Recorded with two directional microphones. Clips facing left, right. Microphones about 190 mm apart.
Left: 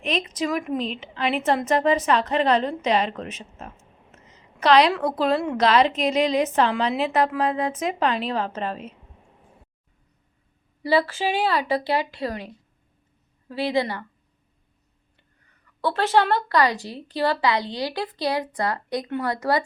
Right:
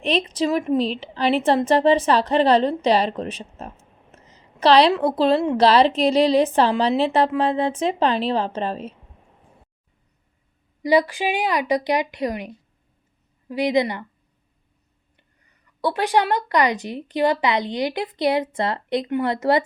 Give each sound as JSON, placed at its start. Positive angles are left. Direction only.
{"t": 0.0, "sound": "a woman's voice", "side_deg": -30}
{"t": 10.8, "sound": "a woman's voice", "side_deg": -15}
{"t": 13.5, "sound": "a woman's voice", "side_deg": -15}
{"t": 15.8, "sound": "speech", "side_deg": -15}